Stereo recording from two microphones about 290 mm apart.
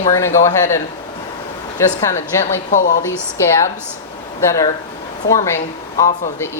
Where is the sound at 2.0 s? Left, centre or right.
Centre.